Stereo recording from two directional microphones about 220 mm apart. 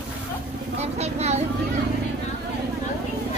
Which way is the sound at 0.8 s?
30° right (ahead or behind).